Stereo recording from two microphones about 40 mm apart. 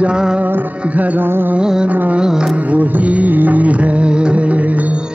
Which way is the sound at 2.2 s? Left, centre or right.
Right.